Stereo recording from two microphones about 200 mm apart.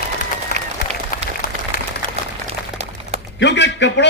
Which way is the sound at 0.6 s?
35° right (ahead or behind).